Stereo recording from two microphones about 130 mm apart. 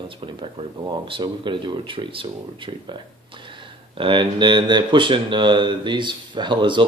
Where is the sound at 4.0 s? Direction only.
40° right (ahead or behind).